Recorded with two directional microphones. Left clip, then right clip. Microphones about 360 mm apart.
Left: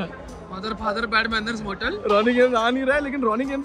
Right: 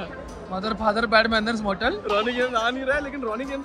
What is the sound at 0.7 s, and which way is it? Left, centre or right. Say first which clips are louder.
Speech: right 2 dB; centre.